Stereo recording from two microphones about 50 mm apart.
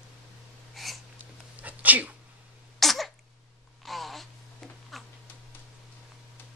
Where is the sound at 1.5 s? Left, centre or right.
Right.